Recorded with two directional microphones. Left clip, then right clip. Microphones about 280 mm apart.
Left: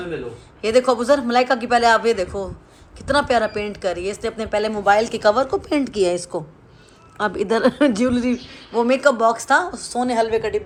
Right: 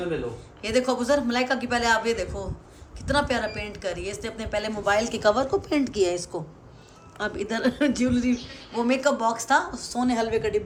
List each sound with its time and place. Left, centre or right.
0.6 s a woman's voice: centre